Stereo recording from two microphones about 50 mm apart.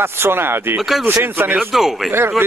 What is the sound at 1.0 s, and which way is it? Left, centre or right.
Speech, right.